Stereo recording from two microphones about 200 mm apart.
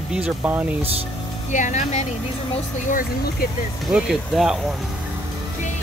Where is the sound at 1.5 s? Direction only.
35° left (ahead or behind).